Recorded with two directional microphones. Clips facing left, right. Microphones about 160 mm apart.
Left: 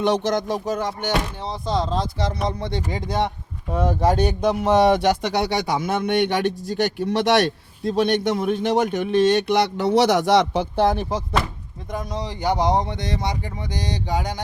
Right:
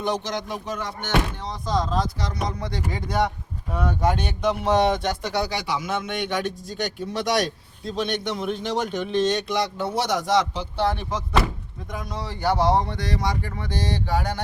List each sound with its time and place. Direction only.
0.0 s speech: 70° left (ahead or behind)
0.3 s speech: 40° left (ahead or behind)
1.5 s speech: 30° left (ahead or behind)
4.9 s speech: 80° left
5.6 s speech: 50° left (ahead or behind)
12.1 s speech: 15° left (ahead or behind)